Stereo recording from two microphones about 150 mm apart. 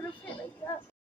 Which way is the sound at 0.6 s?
15° left (ahead or behind).